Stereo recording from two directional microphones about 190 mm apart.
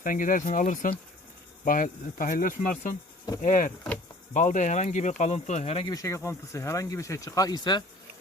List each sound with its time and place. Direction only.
0.0 s speech: 45° left (ahead or behind)
5.9 s speech: 15° left (ahead or behind)